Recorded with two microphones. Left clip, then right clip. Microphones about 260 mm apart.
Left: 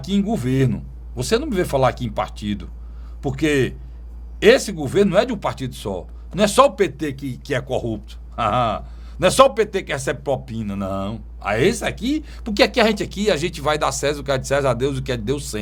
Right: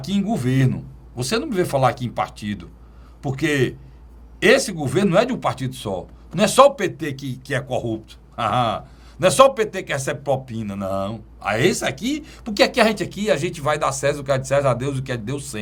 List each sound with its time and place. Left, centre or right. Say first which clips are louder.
0.0 s a man's voice: left 1 dB; left